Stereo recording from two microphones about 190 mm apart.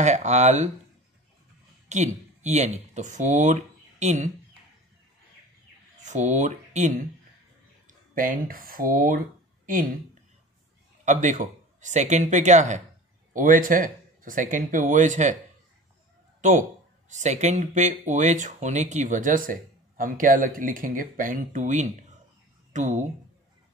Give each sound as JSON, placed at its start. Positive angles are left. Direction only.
{"t": 0.0, "sound": "speech", "side_deg": -40}
{"t": 1.9, "sound": "speech", "side_deg": -40}
{"t": 6.0, "sound": "speech", "side_deg": -40}
{"t": 8.1, "sound": "speech", "side_deg": -45}
{"t": 11.1, "sound": "speech", "side_deg": -40}
{"t": 16.3, "sound": "cat", "side_deg": -40}
{"t": 17.1, "sound": "speech", "side_deg": -40}